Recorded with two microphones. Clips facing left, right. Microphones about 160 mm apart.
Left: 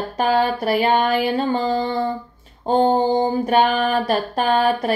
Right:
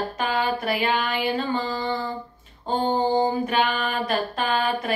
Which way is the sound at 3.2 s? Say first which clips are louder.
Left 5 dB; 35° left (ahead or behind).